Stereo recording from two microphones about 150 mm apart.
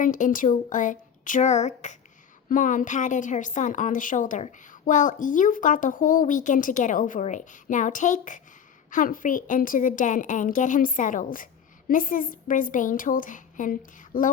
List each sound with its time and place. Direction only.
0.0 s a woman's voice: 65° left (ahead or behind)